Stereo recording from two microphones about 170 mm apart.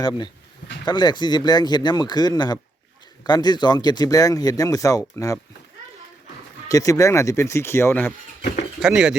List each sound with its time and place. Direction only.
0.9 s speech: 25° left (ahead or behind)
6.7 s speech: 20° left (ahead or behind)
8.8 s speech: 5° right (ahead or behind)